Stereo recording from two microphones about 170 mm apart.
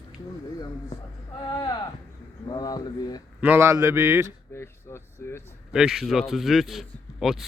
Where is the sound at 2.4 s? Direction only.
25° left (ahead or behind).